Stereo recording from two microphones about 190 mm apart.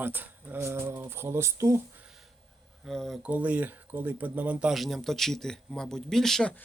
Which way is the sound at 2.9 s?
Centre (ahead or behind).